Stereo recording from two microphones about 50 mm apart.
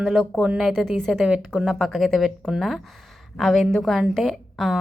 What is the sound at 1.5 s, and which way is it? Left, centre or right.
A woman's voice, centre.